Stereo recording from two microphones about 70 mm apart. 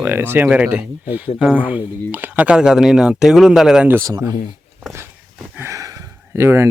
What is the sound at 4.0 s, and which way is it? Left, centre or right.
Speech, right.